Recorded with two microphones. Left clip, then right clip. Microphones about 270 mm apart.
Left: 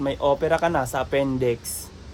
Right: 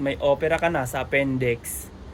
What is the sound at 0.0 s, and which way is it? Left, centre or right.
Speech, centre.